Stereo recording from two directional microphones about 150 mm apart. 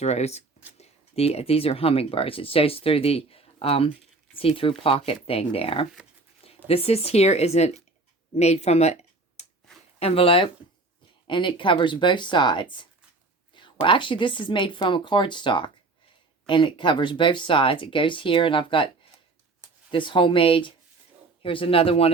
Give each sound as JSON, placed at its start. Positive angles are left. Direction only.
{"t": 0.0, "sound": "speech", "side_deg": 45}
{"t": 8.4, "sound": "a sound", "side_deg": 45}
{"t": 10.0, "sound": "speech", "side_deg": 40}
{"t": 19.9, "sound": "speech", "side_deg": 35}